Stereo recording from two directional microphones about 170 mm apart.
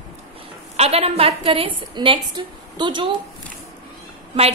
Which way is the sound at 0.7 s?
35° right (ahead or behind).